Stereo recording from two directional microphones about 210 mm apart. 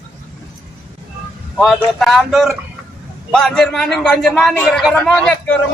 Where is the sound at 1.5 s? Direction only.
Centre (ahead or behind).